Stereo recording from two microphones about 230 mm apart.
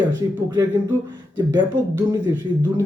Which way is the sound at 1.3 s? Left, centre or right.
Centre.